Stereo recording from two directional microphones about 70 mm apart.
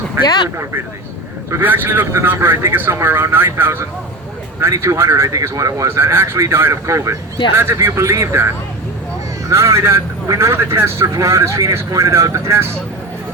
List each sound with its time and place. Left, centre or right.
1.6 s speech: right
4.6 s speech: right